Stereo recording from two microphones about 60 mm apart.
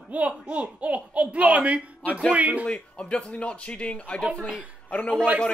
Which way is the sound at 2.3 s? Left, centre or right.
Right.